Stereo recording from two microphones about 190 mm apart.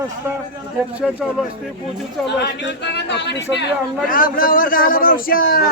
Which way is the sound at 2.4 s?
65° left (ahead or behind).